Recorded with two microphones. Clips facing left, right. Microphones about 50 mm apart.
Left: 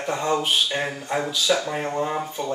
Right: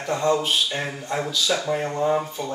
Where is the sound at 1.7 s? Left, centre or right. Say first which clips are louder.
Right 3 dB; centre.